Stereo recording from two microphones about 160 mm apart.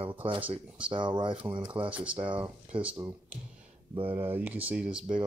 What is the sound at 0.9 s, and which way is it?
Speech, 30° right (ahead or behind).